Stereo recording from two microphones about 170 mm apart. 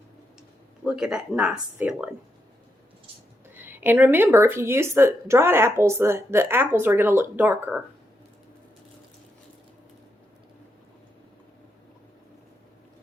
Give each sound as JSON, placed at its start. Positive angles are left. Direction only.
{"t": 0.9, "sound": "speech", "side_deg": -5}
{"t": 3.5, "sound": "speech", "side_deg": -10}